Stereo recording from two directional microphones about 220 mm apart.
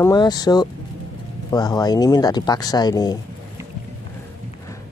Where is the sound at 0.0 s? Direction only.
20° left (ahead or behind).